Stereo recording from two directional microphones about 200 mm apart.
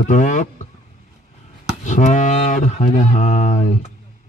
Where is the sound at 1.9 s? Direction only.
40° left (ahead or behind).